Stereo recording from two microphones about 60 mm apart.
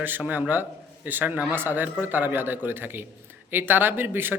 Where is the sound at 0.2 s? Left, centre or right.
Right.